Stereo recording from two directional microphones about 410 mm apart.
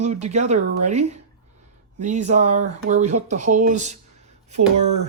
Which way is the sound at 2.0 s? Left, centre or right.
Centre.